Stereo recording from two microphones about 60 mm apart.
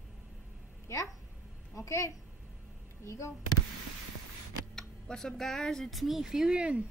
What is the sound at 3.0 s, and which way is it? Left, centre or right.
Speech, left.